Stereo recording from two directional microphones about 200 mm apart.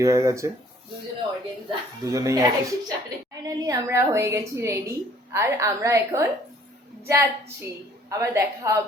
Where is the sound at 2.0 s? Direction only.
15° right (ahead or behind).